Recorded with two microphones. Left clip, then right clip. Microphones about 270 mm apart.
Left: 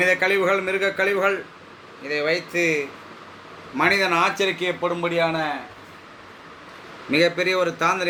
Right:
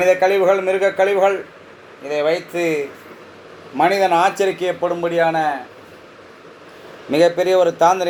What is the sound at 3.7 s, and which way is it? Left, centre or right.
A man's voice, centre.